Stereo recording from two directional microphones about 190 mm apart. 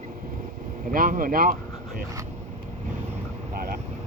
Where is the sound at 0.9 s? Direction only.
45° right (ahead or behind).